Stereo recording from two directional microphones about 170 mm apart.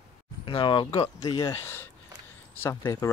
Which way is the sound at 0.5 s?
25° left (ahead or behind).